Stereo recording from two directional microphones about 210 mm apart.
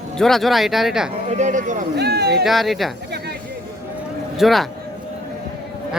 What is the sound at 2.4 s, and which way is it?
Speech, centre (ahead or behind).